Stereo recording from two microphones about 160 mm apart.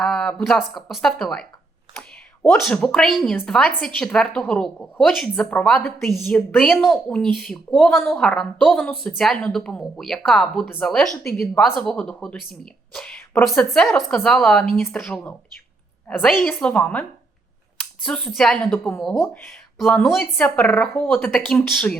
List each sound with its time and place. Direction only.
0.0 s speech: 5° left (ahead or behind)
2.0 s a sound: 5° left (ahead or behind)
2.6 s a woman's voice: 5° left (ahead or behind)
19.8 s a woman's voice: 5° left (ahead or behind)